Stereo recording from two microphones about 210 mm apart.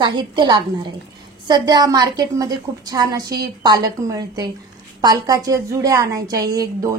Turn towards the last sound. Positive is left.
turn(degrees=-15)  # may be behind; listen again after turning